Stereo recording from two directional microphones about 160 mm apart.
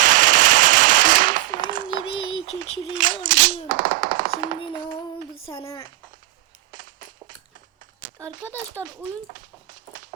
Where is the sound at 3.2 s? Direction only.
60° right (ahead or behind).